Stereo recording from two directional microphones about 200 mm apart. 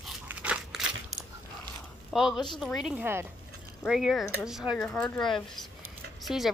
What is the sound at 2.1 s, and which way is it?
A woman's voice, centre (ahead or behind).